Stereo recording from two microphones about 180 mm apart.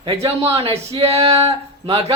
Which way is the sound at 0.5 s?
30° right (ahead or behind).